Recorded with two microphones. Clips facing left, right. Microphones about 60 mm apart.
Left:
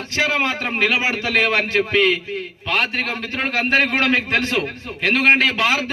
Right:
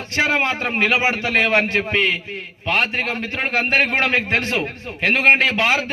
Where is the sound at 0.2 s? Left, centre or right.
Right.